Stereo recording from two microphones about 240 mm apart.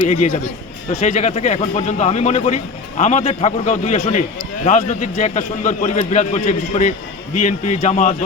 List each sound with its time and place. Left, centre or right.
0.0 s a man's voice: left